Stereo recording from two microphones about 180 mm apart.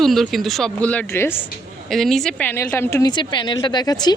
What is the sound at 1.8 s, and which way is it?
A woman's voice, centre (ahead or behind).